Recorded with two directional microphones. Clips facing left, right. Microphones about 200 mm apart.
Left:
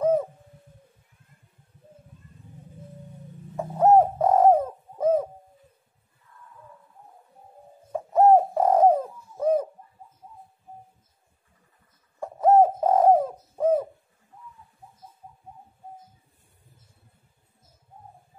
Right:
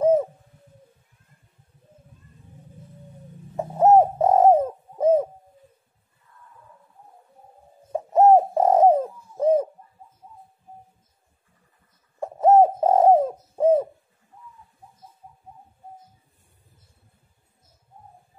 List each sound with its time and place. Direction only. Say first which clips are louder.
0.0 s bird: right 4 dB; 25° right (ahead or behind)
3.5 s bird: right 2 dB; 25° right (ahead or behind)
4.9 s hoot: right 3 dB; 25° right (ahead or behind)
7.9 s bird: right 2 dB; 25° right (ahead or behind)
12.2 s bird: right 2 dB; 25° right (ahead or behind)